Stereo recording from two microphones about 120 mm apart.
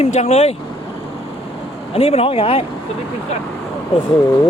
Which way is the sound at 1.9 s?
55° left (ahead or behind).